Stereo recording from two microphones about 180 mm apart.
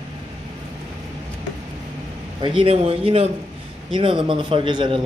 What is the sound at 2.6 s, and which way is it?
A man's voice, 30° right (ahead or behind).